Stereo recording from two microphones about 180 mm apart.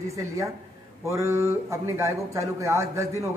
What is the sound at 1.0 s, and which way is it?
Speech, 15° right (ahead or behind).